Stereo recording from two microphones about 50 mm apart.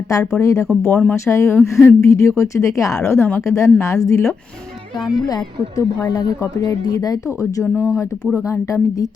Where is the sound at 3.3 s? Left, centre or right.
Left.